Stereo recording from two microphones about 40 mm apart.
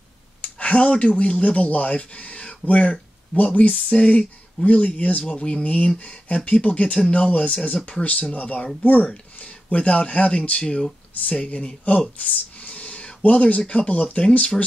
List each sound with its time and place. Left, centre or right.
0.4 s speech: left
3.9 s speech: left
12.2 s a sound: left
13.8 s speech: left